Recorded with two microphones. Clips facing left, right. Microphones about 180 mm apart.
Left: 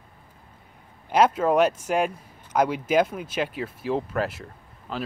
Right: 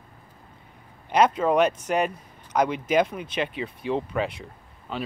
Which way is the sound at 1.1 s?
5° left (ahead or behind).